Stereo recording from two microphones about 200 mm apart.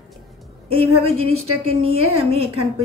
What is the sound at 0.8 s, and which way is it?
Speech, 90° right.